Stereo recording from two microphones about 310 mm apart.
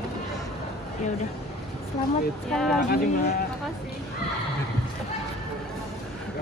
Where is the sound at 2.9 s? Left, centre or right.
Left.